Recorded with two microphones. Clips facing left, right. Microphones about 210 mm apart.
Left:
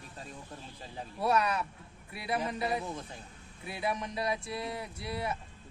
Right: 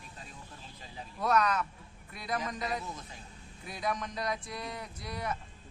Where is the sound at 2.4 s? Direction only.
30° left (ahead or behind).